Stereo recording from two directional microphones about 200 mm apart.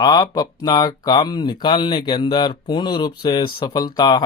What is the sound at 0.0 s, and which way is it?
Speech, 20° left (ahead or behind).